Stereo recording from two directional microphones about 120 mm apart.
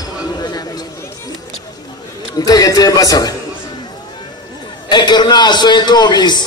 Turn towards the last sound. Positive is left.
turn(degrees=35)  # may be behind; listen again after turning